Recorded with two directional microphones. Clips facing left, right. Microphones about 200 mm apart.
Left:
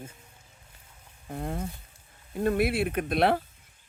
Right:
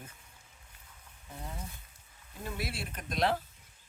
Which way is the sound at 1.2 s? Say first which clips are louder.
Left 11 dB; 60° left (ahead or behind).